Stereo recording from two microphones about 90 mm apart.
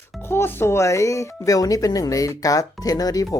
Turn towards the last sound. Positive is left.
turn(degrees=45)  # may be behind; listen again after turning